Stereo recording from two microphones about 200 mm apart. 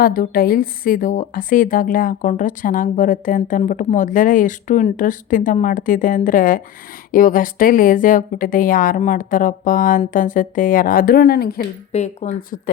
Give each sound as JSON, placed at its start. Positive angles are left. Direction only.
{"t": 0.0, "sound": "a woman's voice", "side_deg": 45}
{"t": 11.9, "sound": "a woman's voice", "side_deg": 35}